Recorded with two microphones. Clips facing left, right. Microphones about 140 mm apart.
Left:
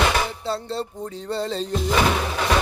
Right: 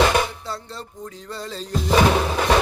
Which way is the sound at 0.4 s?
30° left (ahead or behind).